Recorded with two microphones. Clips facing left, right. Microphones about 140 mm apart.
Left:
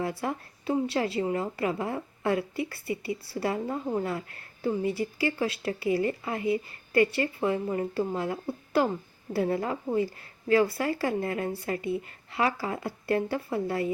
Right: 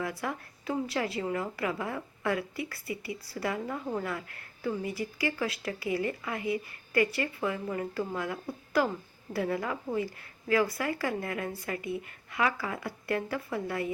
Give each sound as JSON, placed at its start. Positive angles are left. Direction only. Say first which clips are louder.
{"t": 0.0, "sound": "a woman's voice", "louder": "left 3 dB", "side_deg": 25}